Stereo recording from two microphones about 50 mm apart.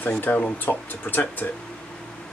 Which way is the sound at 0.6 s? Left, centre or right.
Left.